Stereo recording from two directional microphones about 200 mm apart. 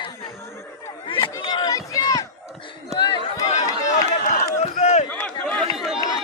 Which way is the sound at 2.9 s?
20° left (ahead or behind).